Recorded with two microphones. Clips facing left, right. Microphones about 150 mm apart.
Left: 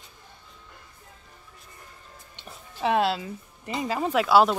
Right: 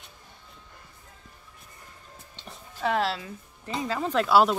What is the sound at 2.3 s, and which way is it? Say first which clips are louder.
Music: even; 15° left (ahead or behind).